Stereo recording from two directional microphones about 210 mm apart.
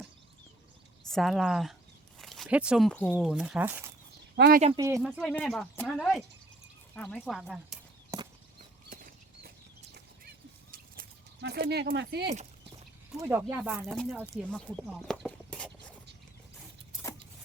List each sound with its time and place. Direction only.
1.1 s speech: centre (ahead or behind)
4.4 s speech: 50° right (ahead or behind)
4.8 s speech: 15° right (ahead or behind)
5.0 s speech: centre (ahead or behind)
8.1 s a sound: 15° right (ahead or behind)
9.9 s a sound: 45° right (ahead or behind)
13.1 s speech: 15° right (ahead or behind); by 14.8 s 5° left (ahead or behind)
14.8 s horse: centre (ahead or behind)